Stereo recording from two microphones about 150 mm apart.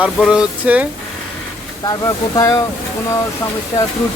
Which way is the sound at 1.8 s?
25° left (ahead or behind).